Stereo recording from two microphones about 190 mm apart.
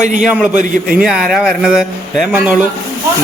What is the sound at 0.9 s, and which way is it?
Speech, 5° right (ahead or behind).